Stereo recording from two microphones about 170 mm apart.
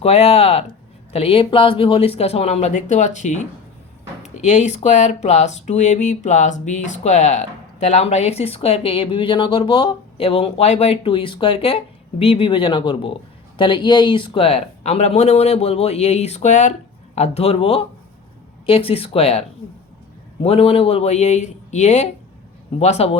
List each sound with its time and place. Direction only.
0.0 s speech: 35° left (ahead or behind)